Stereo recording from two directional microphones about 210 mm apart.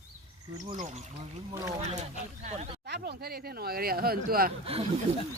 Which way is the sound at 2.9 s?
50° right (ahead or behind).